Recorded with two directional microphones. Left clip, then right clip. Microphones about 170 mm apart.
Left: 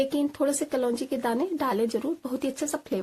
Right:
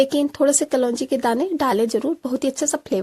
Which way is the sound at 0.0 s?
50° right (ahead or behind).